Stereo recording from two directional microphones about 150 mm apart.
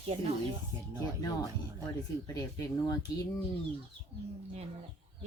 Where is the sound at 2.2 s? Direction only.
20° left (ahead or behind).